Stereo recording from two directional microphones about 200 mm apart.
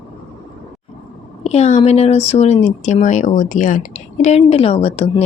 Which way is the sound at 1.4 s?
35° left (ahead or behind).